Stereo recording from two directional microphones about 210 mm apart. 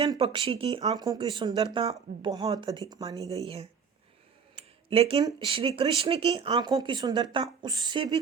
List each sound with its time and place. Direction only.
0.0 s a woman's voice: 25° right (ahead or behind)
3.4 s speech: 30° right (ahead or behind)
4.5 s a sound: 25° right (ahead or behind)
5.5 s speech: 25° right (ahead or behind)